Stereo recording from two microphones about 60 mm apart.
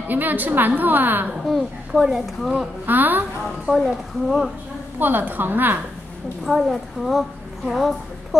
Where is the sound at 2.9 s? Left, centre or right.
Right.